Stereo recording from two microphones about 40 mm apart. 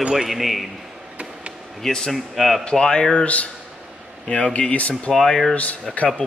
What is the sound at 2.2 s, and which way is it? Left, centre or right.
Speech, centre.